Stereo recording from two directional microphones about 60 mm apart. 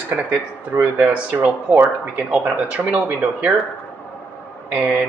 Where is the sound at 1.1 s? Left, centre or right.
Right.